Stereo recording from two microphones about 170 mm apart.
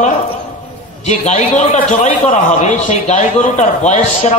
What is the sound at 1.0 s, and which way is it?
A man's voice, 40° left (ahead or behind).